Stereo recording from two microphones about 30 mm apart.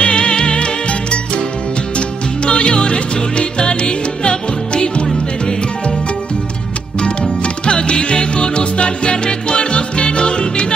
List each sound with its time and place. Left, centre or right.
0.0 s music: left
7.0 s music: left